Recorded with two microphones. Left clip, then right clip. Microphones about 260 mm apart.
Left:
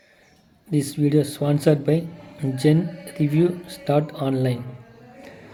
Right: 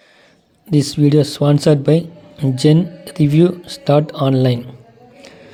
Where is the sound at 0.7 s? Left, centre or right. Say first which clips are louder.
Right 7 dB; right.